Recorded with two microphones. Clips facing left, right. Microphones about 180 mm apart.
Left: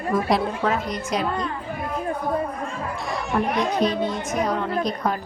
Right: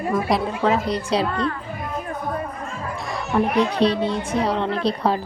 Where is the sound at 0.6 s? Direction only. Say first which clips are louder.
Right 4 dB; 30° right (ahead or behind).